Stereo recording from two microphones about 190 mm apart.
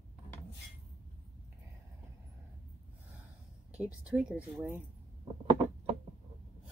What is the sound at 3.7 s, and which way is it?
Speech, 5° right (ahead or behind).